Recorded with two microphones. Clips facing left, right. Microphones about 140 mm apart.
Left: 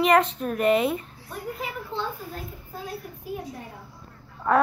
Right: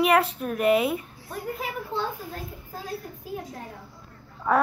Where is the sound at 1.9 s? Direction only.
40° right (ahead or behind).